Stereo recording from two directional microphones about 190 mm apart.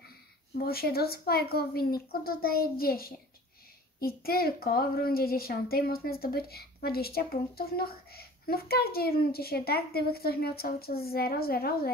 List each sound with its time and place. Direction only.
0.6 s a woman's voice: 55° left (ahead or behind)